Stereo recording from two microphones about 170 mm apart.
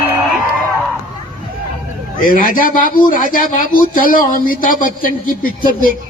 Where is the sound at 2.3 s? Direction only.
55° left (ahead or behind).